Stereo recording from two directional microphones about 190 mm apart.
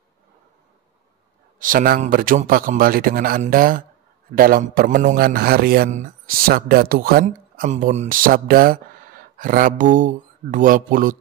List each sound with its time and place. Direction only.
1.6 s speech: 45° right (ahead or behind)